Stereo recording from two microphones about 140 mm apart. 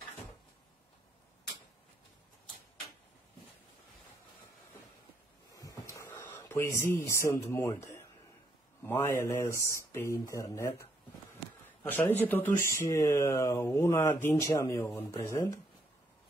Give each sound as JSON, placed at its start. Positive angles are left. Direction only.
{"t": 5.5, "sound": "a sound", "side_deg": 25}
{"t": 6.3, "sound": "speech", "side_deg": 20}
{"t": 11.9, "sound": "speech", "side_deg": 15}